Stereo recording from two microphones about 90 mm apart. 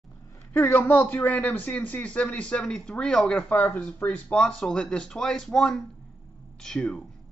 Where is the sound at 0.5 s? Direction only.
25° left (ahead or behind); by 7.0 s 10° left (ahead or behind).